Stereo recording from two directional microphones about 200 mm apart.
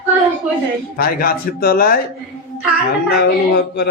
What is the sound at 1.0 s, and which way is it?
A man's voice, 45° left (ahead or behind).